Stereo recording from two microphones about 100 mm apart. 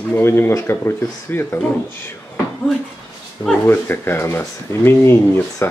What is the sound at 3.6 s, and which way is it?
Speech, 20° left (ahead or behind).